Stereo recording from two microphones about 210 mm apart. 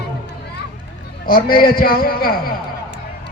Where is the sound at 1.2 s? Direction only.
45° left (ahead or behind).